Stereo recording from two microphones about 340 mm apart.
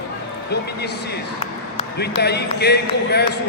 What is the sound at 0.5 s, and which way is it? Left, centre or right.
Speech, left.